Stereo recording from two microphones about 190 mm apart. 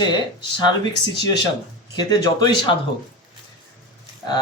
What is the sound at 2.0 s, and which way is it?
Speech, 20° left (ahead or behind).